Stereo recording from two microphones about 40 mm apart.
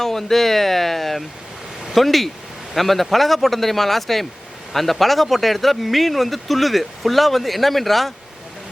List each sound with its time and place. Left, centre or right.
0.0 s speech: centre